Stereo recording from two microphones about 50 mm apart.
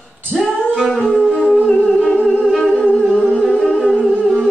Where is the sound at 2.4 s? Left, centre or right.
Centre.